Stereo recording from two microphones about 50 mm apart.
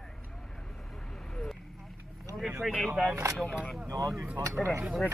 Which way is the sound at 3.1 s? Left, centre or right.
Right.